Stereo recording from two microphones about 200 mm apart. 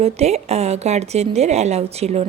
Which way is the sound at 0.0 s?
35° right (ahead or behind).